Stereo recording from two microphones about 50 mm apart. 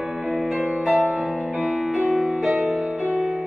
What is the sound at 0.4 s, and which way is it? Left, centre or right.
Music, centre.